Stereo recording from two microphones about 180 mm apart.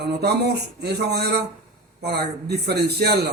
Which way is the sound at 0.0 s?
65° right (ahead or behind).